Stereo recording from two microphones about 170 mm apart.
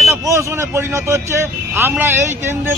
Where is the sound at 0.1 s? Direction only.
15° right (ahead or behind).